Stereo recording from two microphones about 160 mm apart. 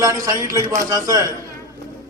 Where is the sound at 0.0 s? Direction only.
20° right (ahead or behind).